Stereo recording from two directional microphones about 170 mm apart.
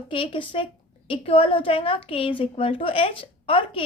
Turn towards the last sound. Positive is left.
turn(degrees=30)  # may be behind; listen again after turning